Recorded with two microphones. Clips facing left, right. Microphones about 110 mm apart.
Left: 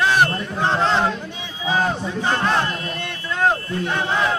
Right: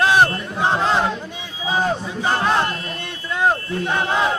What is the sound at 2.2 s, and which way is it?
Speech, 10° right (ahead or behind).